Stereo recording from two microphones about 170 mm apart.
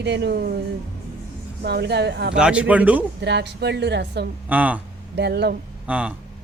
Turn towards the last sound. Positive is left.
turn(degrees=-5)  # may be behind; listen again after turning